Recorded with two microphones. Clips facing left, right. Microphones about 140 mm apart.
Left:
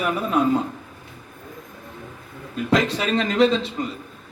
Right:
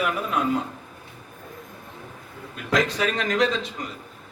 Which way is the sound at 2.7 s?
25° left (ahead or behind).